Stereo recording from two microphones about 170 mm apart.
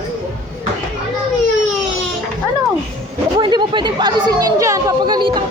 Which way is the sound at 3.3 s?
25° right (ahead or behind).